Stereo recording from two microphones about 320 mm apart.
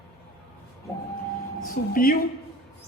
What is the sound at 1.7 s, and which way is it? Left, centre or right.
Speech, left.